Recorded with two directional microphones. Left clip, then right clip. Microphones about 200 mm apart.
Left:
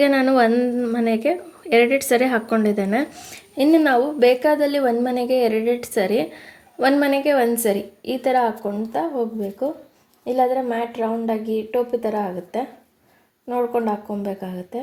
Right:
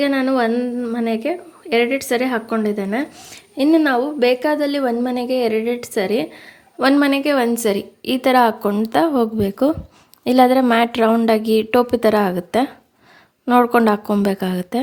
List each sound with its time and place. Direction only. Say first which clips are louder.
0.0 s speech: left 2 dB; 5° right (ahead or behind); by 14.8 s 45° right (ahead or behind)